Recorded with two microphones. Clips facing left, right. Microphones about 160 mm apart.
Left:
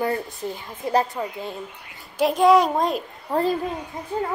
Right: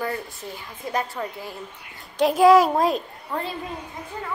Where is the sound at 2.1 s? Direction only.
Centre (ahead or behind).